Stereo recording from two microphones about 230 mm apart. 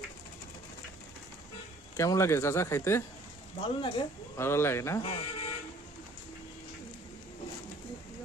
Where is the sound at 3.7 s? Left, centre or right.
Left.